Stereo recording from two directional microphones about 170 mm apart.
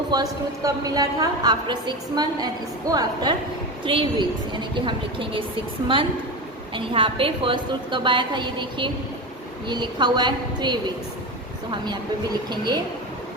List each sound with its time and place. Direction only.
0.1 s a woman's voice: 20° right (ahead or behind)
6.7 s a woman's voice: 30° right (ahead or behind)
12.5 s a woman's voice: 25° right (ahead or behind)